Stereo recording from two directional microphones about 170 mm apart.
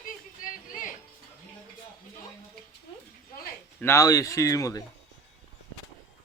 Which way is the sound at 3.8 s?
15° left (ahead or behind).